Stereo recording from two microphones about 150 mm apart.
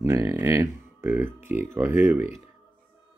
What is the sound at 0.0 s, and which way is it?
Speech, 20° right (ahead or behind).